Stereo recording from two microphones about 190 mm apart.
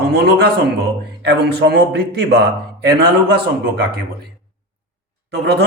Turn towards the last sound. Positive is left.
turn(degrees=-60)  # may be behind; listen again after turning